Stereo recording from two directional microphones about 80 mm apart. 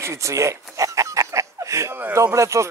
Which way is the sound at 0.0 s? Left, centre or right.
Right.